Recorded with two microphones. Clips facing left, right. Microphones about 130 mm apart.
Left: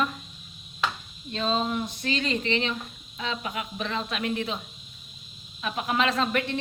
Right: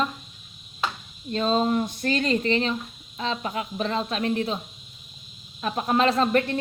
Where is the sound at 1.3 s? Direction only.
40° right (ahead or behind).